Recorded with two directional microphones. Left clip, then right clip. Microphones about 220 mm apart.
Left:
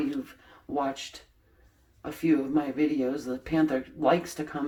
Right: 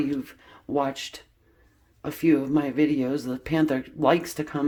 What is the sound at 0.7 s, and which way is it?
Speech, 55° right (ahead or behind).